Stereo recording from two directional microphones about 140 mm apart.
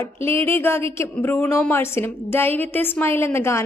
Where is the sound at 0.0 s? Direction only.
20° left (ahead or behind).